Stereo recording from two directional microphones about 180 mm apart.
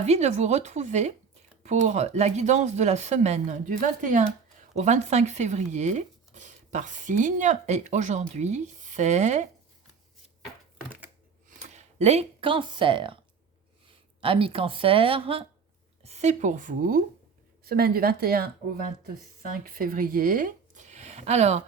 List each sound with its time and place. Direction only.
0.0 s speech: 40° right (ahead or behind)
11.4 s speech: 40° right (ahead or behind)
14.2 s a woman's voice: 30° right (ahead or behind)
17.6 s a woman's voice: 55° right (ahead or behind)
19.6 s speech: 50° right (ahead or behind)